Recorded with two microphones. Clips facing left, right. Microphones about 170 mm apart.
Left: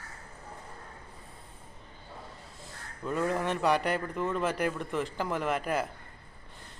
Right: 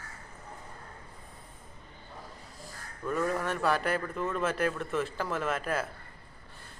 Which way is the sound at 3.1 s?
20° left (ahead or behind).